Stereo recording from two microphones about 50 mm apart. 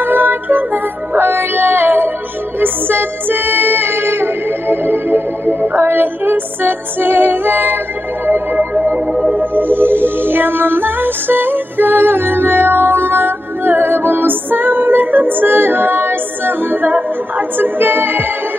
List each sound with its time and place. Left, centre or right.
0.0 s music: right